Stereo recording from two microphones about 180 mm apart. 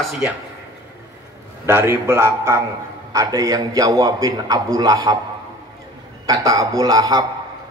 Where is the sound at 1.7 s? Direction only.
15° right (ahead or behind).